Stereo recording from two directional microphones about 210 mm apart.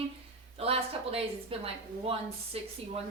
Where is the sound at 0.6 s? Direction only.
30° right (ahead or behind).